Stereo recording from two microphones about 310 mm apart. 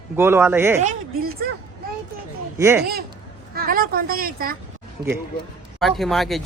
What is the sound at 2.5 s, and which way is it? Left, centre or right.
Speech, centre.